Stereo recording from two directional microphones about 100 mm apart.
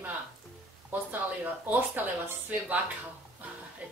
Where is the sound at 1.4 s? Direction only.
15° right (ahead or behind).